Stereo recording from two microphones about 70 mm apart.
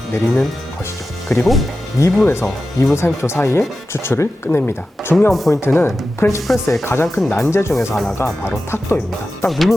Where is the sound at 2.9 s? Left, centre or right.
Left.